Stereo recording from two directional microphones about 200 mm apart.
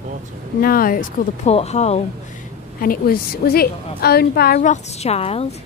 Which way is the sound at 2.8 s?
45° left (ahead or behind).